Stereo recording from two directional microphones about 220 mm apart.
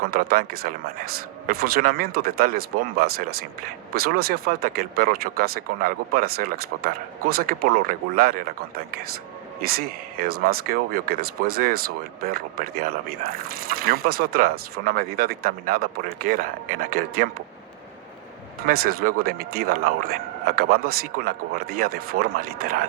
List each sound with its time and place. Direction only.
0.0 s speech: 40° right (ahead or behind)
9.6 s speech: 45° right (ahead or behind)
18.6 s speech: 40° right (ahead or behind)